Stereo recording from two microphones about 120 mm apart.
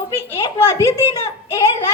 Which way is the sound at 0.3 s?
20° left (ahead or behind).